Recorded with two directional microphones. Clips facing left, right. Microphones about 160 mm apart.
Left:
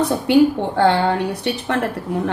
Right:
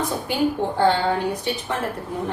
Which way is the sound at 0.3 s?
75° left (ahead or behind).